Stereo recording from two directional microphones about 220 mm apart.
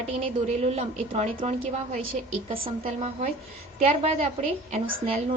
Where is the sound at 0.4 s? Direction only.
30° right (ahead or behind).